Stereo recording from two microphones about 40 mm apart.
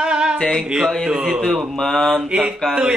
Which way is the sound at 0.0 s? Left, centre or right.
Right.